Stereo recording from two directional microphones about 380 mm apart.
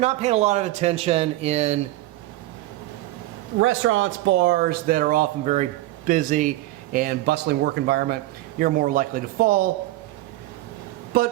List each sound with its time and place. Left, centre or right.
0.0 s speech: centre
3.6 s speech: right
11.1 s speech: right